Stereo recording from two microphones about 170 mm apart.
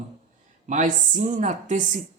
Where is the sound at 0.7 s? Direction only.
50° right (ahead or behind).